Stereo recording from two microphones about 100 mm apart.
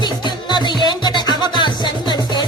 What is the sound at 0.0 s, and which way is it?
Music, 45° left (ahead or behind).